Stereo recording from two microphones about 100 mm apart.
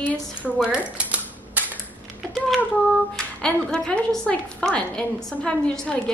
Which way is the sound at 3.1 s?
5° left (ahead or behind).